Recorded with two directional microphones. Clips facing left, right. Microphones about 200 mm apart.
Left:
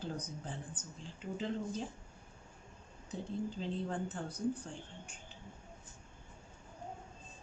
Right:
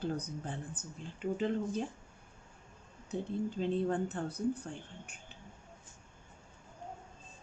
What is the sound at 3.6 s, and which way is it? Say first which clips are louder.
Speech: right 6 dB; 60° right (ahead or behind).